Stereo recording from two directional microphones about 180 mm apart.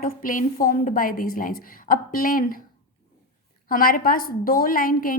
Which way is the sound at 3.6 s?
50° left (ahead or behind).